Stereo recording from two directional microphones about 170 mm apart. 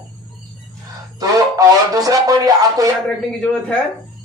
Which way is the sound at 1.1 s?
20° right (ahead or behind).